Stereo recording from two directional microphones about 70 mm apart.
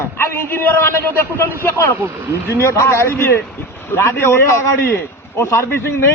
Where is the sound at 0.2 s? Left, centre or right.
Left.